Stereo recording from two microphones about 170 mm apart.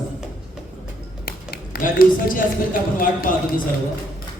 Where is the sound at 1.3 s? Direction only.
60° left (ahead or behind).